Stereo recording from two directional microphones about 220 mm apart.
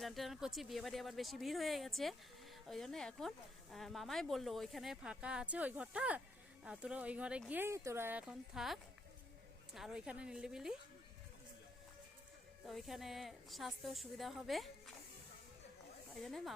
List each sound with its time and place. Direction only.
0.0 s speech: centre (ahead or behind)
12.6 s speech: centre (ahead or behind)
16.1 s speech: centre (ahead or behind)